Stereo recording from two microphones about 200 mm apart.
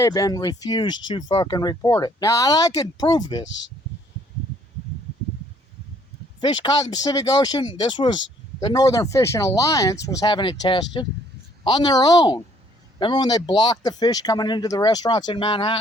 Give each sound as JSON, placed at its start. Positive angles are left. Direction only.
{"t": 0.0, "sound": "speech", "side_deg": 20}
{"t": 3.4, "sound": "speech", "side_deg": 65}
{"t": 6.4, "sound": "speech", "side_deg": 20}